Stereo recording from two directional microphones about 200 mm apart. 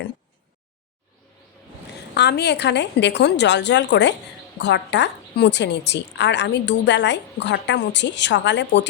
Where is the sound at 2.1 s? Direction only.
55° left (ahead or behind).